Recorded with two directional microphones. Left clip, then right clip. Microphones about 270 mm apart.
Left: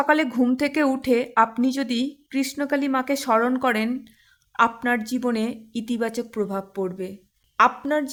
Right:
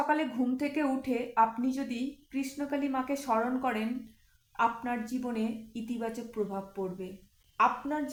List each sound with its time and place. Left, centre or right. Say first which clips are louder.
0.0 s a woman's voice: left 9 dB; left